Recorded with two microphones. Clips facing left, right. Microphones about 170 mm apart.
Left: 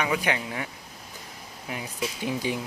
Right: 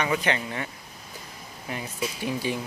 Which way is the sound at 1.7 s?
10° left (ahead or behind).